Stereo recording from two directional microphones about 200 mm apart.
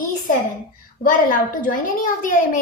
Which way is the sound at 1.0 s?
40° left (ahead or behind).